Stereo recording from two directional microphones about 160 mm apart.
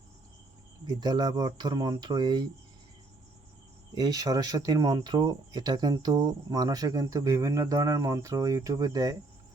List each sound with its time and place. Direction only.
0.9 s speech: 25° right (ahead or behind)
3.9 s speech: 25° right (ahead or behind)